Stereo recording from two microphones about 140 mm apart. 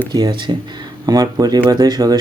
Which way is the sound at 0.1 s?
30° right (ahead or behind).